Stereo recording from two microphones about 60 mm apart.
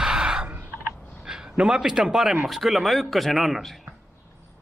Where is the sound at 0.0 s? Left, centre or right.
Centre.